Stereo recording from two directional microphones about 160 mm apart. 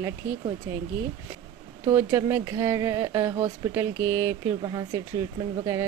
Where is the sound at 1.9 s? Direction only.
15° right (ahead or behind).